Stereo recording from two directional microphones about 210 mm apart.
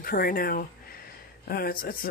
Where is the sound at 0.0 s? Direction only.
45° left (ahead or behind).